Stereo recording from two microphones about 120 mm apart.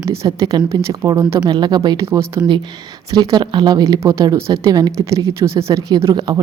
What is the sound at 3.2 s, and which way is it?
A woman's voice, 35° right (ahead or behind).